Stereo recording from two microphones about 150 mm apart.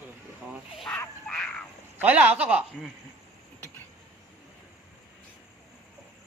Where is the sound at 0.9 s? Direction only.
5° left (ahead or behind).